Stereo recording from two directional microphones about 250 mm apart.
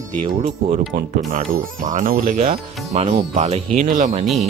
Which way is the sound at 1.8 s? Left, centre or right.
Right.